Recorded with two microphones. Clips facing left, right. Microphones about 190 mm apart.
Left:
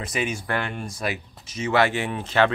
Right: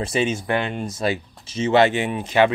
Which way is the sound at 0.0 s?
30° right (ahead or behind).